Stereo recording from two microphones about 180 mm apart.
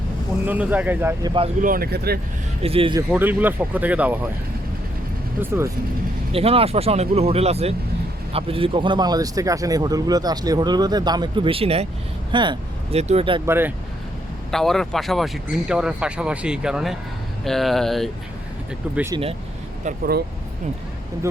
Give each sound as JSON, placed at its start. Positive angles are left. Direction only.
{"t": 0.4, "sound": "speech", "side_deg": -10}
{"t": 1.2, "sound": "speech", "side_deg": -25}
{"t": 1.6, "sound": "speech", "side_deg": -55}
{"t": 2.6, "sound": "speech", "side_deg": -30}
{"t": 3.1, "sound": "speech", "side_deg": -10}
{"t": 5.4, "sound": "speech", "side_deg": -15}
{"t": 6.3, "sound": "speech", "side_deg": -30}
{"t": 13.4, "sound": "speech", "side_deg": -10}
{"t": 14.5, "sound": "speech", "side_deg": 0}
{"t": 19.1, "sound": "speech", "side_deg": -25}